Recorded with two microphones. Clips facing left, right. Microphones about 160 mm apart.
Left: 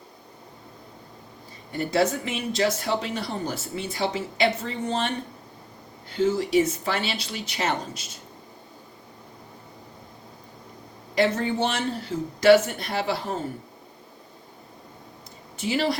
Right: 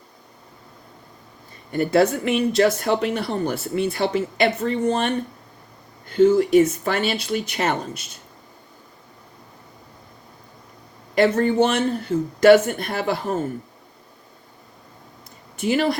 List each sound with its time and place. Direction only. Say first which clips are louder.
1.7 s speech: right 5 dB; 55° right (ahead or behind)
11.1 s speech: right 5 dB; 55° right (ahead or behind)
15.5 s speech: right 4 dB; 55° right (ahead or behind)